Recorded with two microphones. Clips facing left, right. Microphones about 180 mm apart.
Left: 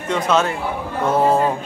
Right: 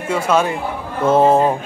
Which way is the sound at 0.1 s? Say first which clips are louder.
Right 1 dB; 10° right (ahead or behind).